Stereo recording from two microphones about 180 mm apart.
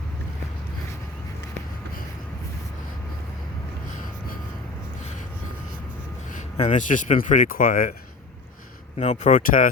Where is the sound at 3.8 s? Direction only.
50° left (ahead or behind).